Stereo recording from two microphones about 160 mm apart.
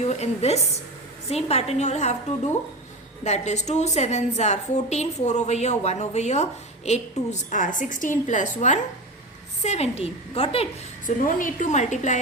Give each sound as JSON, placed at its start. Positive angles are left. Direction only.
{"t": 0.0, "sound": "a woman's voice", "side_deg": 45}
{"t": 11.0, "sound": "a woman's voice", "side_deg": 60}